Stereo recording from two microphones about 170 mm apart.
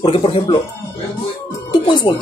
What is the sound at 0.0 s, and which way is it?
Speech, 35° left (ahead or behind).